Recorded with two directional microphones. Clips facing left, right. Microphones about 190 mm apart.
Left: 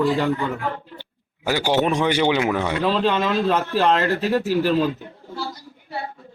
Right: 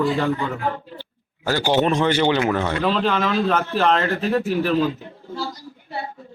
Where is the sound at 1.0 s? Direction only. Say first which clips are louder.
Right 2 dB; 10° left (ahead or behind).